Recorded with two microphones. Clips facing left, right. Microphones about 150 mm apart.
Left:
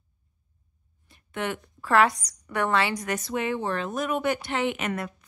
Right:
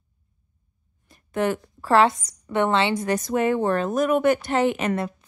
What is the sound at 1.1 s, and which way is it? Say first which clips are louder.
A woman's voice: right 7 dB; 40° right (ahead or behind).